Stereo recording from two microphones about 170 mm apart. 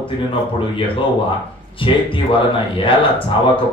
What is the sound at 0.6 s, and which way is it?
Speech, 30° left (ahead or behind).